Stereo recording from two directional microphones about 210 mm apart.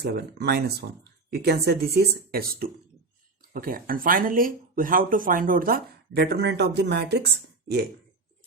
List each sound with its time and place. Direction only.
0.0 s speech: 50° right (ahead or behind)